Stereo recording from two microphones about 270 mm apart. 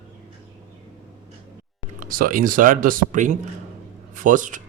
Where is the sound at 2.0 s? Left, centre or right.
Right.